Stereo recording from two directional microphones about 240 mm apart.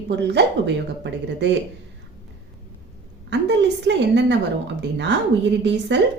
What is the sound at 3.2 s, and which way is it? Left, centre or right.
A woman's voice, right.